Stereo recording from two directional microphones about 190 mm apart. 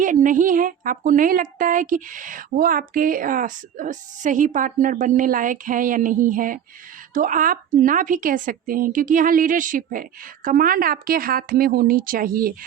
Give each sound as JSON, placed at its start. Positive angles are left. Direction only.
{"t": 0.0, "sound": "speech", "side_deg": -45}